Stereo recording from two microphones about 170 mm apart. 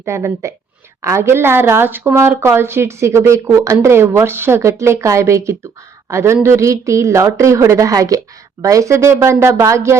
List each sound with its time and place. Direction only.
0.0 s a woman's voice: 15° right (ahead or behind)